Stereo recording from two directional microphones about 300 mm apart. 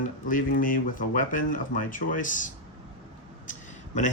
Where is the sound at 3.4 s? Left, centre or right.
Left.